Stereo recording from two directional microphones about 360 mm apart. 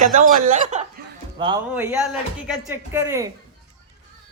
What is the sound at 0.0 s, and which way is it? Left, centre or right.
Speech, right.